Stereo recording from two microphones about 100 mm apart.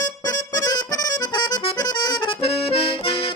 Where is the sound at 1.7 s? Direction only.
45° left (ahead or behind).